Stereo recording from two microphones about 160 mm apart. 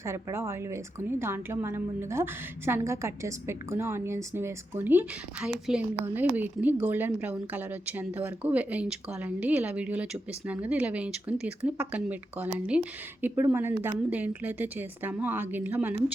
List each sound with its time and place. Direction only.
0.0 s a woman's voice: 15° right (ahead or behind)